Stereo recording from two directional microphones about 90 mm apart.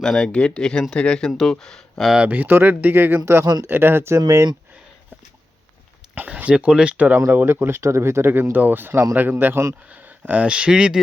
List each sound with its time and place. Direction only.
0.0 s speech: 5° left (ahead or behind)
2.1 s speech: 15° right (ahead or behind)
4.2 s speech: 45° right (ahead or behind)
6.1 s speech: 15° right (ahead or behind)